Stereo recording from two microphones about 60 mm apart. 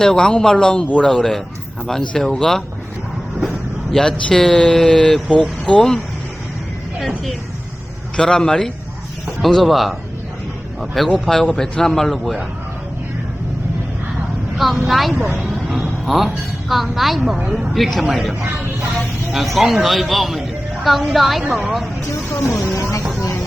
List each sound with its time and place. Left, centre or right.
0.0 s a man's voice: centre
3.9 s speech: centre
5.3 s speech: centre
8.1 s a man's voice: centre
14.6 s a man's voice: centre
22.7 s a sound: left